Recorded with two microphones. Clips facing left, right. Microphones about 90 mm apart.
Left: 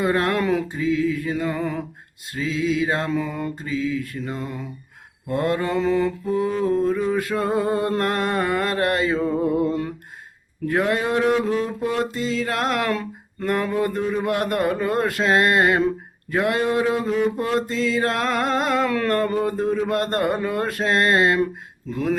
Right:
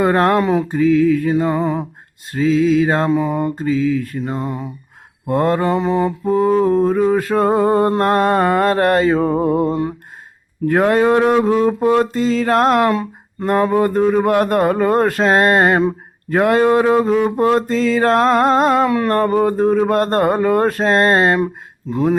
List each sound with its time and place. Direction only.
0.0 s mantra: 45° right (ahead or behind)
1.3 s music: 35° right (ahead or behind)
2.3 s music: 40° right (ahead or behind)
3.1 s music: 30° right (ahead or behind)
5.7 s mantra: 25° right (ahead or behind)
6.2 s music: 40° right (ahead or behind)
10.7 s mantra: 45° right (ahead or behind)
12.9 s music: 30° right (ahead or behind)
18.9 s mantra: 20° right (ahead or behind)
19.1 s music: 40° right (ahead or behind)
21.4 s speech: 30° right (ahead or behind)